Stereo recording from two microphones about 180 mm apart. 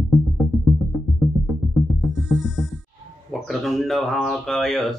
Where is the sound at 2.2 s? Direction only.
Centre (ahead or behind).